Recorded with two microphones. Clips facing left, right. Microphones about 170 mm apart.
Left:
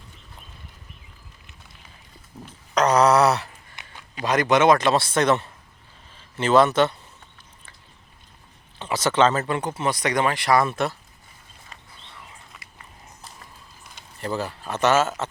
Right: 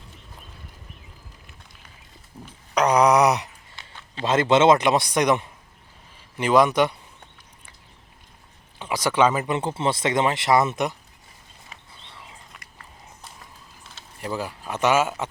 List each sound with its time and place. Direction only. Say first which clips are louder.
2.7 s groan: even; 10° right (ahead or behind)
3.8 s a sound: even; 20° left (ahead or behind)
4.2 s a man's voice: right 1 dB; 25° right (ahead or behind)
8.8 s speech: left 1 dB; 10° right (ahead or behind)
9.6 s speech: right 1 dB; 25° right (ahead or behind)
11.7 s a sound: even; centre (ahead or behind)
14.2 s a man's voice: left 2 dB; 10° right (ahead or behind)